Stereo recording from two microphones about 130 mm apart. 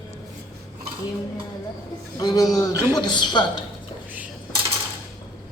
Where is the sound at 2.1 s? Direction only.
30° left (ahead or behind).